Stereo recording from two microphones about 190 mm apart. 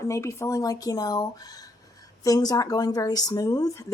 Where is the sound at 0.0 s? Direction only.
15° left (ahead or behind).